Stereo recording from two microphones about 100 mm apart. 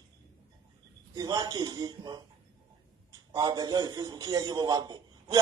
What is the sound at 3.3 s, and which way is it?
A man's voice, 45° right (ahead or behind).